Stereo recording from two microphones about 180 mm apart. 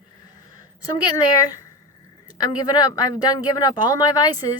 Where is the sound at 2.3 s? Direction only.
20° left (ahead or behind).